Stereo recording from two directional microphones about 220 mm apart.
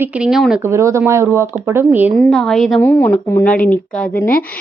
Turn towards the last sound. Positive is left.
turn(degrees=5)  # may be behind; listen again after turning